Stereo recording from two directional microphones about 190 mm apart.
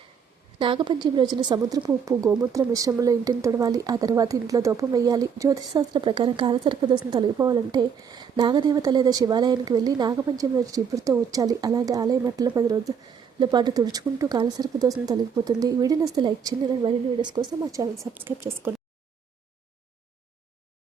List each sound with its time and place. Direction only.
0.6 s speech: 25° right (ahead or behind)
17.9 s speech: centre (ahead or behind)